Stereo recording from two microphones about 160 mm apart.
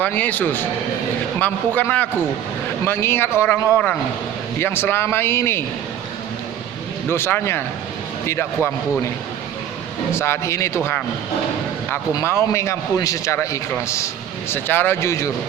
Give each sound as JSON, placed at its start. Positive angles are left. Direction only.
{"t": 0.0, "sound": "speech", "side_deg": 10}
{"t": 7.1, "sound": "speech", "side_deg": 15}
{"t": 10.2, "sound": "speech", "side_deg": 15}
{"t": 12.1, "sound": "a man's voice", "side_deg": 15}